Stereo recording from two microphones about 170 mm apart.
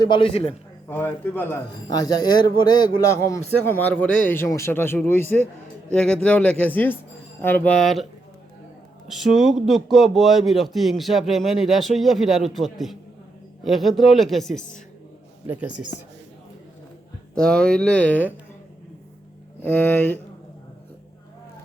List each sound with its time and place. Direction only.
0.0 s a man's voice: 30° left (ahead or behind)
0.9 s speech: 10° left (ahead or behind)
1.9 s a man's voice: 25° left (ahead or behind); by 8.0 s centre (ahead or behind)
9.0 s a man's voice: centre (ahead or behind)
17.3 s a man's voice: 5° left (ahead or behind)
19.6 s speech: 10° left (ahead or behind)